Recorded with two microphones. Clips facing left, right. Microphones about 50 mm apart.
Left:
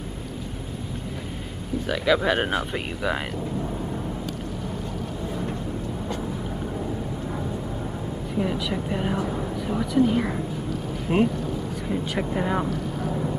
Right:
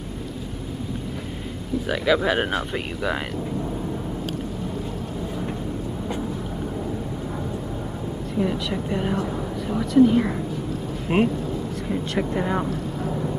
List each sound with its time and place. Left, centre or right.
1.9 s speech: centre
8.4 s speech: centre
11.1 s speech: right
11.9 s speech: centre
13.1 s vehicle: centre